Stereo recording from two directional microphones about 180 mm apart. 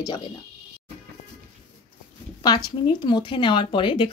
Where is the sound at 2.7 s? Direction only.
25° left (ahead or behind).